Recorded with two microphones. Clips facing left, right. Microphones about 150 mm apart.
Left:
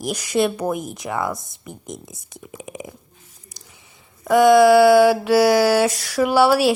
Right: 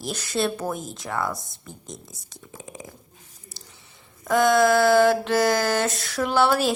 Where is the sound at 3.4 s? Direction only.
15° left (ahead or behind).